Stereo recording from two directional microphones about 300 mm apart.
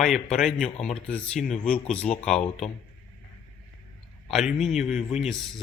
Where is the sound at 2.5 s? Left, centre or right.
Left.